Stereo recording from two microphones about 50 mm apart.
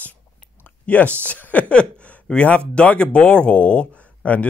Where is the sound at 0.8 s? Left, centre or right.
Left.